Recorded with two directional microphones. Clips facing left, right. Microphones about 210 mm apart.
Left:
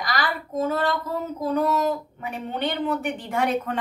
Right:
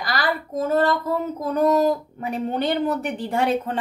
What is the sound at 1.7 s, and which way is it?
Speech, 40° right (ahead or behind).